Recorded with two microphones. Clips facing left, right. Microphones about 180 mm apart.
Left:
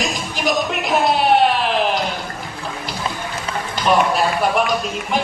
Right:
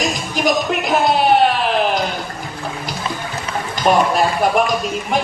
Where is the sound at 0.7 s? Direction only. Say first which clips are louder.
Right 2 dB; centre (ahead or behind).